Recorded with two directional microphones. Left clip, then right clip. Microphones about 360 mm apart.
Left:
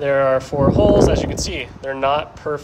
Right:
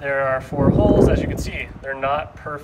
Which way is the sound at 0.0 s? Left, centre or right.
Centre.